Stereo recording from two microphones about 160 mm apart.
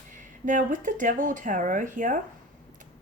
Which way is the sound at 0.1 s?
55° right (ahead or behind).